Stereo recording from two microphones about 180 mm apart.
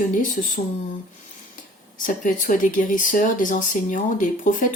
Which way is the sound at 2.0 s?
45° left (ahead or behind).